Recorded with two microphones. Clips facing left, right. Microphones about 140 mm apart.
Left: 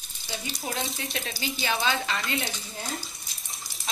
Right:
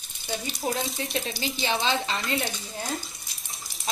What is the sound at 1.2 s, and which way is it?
Speech, 25° right (ahead or behind).